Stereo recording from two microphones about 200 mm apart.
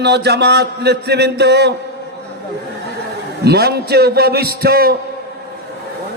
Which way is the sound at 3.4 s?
55° right (ahead or behind).